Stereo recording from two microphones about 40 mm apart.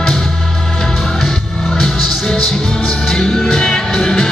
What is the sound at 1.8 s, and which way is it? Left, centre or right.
Music, centre.